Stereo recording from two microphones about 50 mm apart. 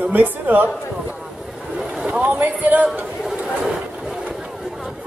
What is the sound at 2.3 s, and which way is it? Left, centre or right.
Speech, right.